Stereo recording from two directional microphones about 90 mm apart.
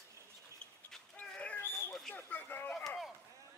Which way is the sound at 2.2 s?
20° left (ahead or behind).